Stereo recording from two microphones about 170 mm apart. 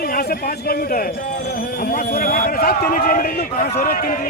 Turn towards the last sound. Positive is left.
turn(degrees=60)  # may be behind; listen again after turning